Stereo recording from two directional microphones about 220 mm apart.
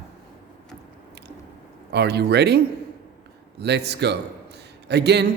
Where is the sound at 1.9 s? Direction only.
50° right (ahead or behind).